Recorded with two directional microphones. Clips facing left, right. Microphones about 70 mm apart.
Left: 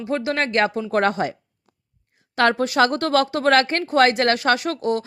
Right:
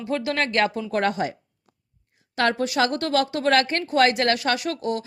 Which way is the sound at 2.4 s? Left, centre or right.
Left.